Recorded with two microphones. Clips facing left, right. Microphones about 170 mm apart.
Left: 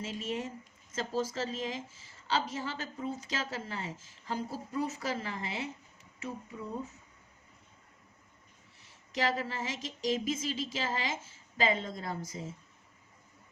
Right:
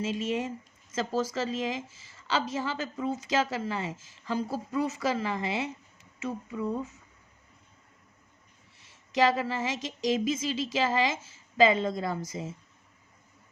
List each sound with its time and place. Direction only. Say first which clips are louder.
0.0 s a woman's voice: right 6 dB; 90° right
9.1 s a woman's voice: right 7 dB; 90° right